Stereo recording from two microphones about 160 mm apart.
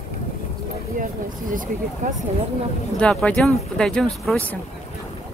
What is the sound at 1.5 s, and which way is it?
Speech, 55° right (ahead or behind).